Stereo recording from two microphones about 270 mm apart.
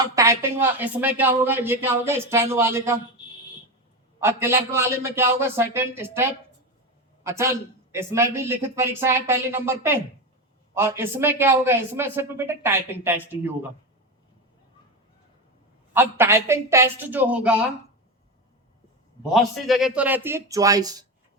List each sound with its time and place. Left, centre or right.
0.0 s a woman's voice: centre
4.2 s a woman's voice: centre
7.3 s a woman's voice: centre
15.9 s a woman's voice: centre
19.2 s a woman's voice: centre